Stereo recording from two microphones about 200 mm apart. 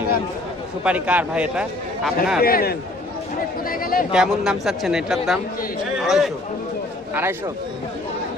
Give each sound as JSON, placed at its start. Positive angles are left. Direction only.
{"t": 0.9, "sound": "speech", "side_deg": -5}
{"t": 2.4, "sound": "a man's voice", "side_deg": 50}
{"t": 4.1, "sound": "speech", "side_deg": -5}
{"t": 6.0, "sound": "chatter", "side_deg": 0}
{"t": 7.1, "sound": "speech", "side_deg": -10}